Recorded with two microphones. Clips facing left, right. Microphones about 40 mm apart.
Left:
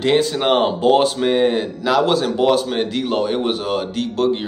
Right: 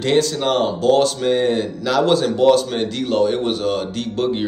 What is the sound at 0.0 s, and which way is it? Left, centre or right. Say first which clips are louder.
Speech: left 1 dB; centre.